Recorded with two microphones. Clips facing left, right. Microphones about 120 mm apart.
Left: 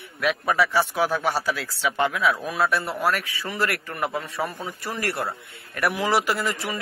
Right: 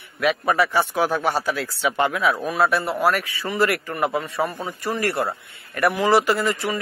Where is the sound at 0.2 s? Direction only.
Centre (ahead or behind).